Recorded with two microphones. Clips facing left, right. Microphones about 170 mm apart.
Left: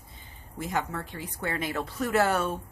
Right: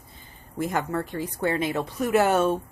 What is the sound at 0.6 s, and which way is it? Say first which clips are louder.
Speech: right 5 dB; 50° right (ahead or behind).